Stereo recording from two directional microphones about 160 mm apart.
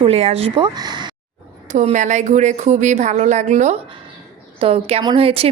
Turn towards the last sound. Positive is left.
turn(degrees=-35)  # may be behind; listen again after turning